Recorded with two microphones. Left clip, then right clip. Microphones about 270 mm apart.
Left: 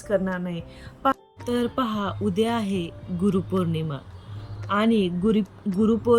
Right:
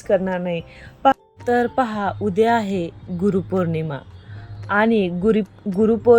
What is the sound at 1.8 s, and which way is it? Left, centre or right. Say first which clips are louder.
A woman's voice: right 6 dB; right.